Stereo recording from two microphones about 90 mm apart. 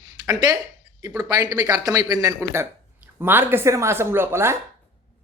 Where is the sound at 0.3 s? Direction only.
45° right (ahead or behind).